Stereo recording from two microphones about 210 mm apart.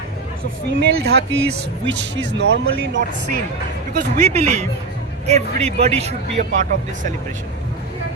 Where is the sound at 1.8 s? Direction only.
55° right (ahead or behind).